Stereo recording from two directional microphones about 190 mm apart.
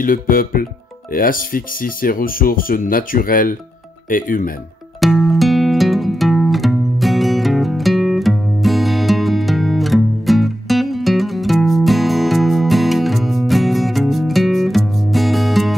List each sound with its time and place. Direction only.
0.0 s speech: 50° left (ahead or behind)
5.0 s music: centre (ahead or behind)